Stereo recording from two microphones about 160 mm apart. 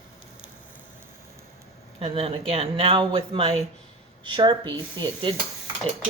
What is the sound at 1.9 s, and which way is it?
Speech, 35° right (ahead or behind).